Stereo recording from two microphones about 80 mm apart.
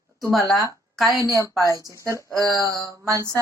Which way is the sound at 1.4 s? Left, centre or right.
Right.